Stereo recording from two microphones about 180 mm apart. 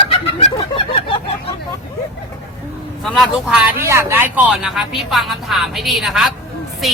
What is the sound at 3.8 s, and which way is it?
Speech, 15° right (ahead or behind).